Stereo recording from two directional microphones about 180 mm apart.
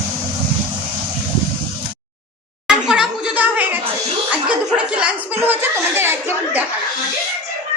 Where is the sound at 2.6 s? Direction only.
5° right (ahead or behind).